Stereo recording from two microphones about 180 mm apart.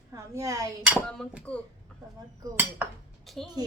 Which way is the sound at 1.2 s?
5° right (ahead or behind).